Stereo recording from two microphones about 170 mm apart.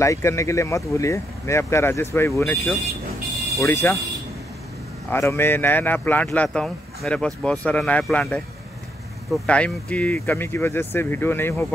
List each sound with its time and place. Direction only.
0.0 s speech: 15° left (ahead or behind)
5.1 s speech: 15° left (ahead or behind)